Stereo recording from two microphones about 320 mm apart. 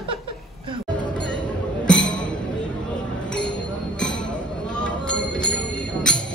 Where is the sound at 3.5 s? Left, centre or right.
Centre.